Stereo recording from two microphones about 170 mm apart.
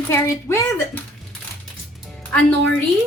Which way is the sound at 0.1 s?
15° left (ahead or behind).